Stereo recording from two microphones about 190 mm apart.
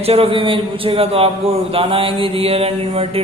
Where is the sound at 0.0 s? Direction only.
30° right (ahead or behind).